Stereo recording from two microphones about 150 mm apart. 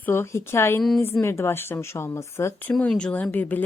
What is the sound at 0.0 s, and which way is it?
Speech, 15° left (ahead or behind).